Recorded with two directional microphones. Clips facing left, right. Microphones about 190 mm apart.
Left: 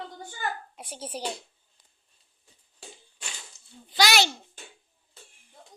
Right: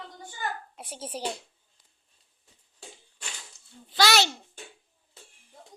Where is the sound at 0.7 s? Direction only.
5° right (ahead or behind).